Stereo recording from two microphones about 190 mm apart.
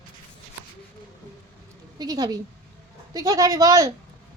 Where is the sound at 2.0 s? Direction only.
20° right (ahead or behind).